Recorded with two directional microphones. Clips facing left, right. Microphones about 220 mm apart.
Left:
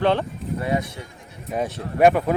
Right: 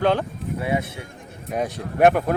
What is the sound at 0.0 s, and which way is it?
Speech, centre (ahead or behind).